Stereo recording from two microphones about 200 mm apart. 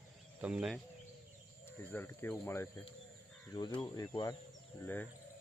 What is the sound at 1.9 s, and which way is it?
Speech, 10° left (ahead or behind).